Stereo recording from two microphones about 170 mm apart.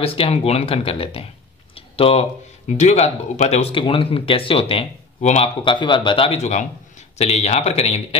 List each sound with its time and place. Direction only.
0.0 s speech: 35° left (ahead or behind)
5.6 s speech: 30° left (ahead or behind)